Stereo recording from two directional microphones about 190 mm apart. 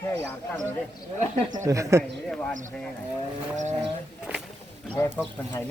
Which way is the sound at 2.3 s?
5° left (ahead or behind).